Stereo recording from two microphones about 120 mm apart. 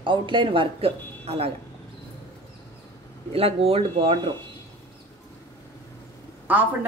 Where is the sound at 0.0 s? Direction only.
45° right (ahead or behind).